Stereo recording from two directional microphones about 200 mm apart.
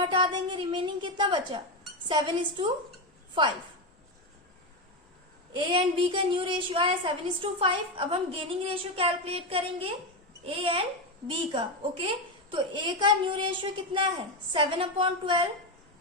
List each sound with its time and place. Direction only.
0.0 s a woman's voice: 25° right (ahead or behind)
5.5 s a woman's voice: 25° right (ahead or behind)